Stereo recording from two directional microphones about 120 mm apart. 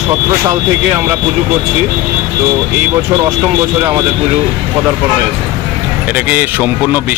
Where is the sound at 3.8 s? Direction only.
30° right (ahead or behind).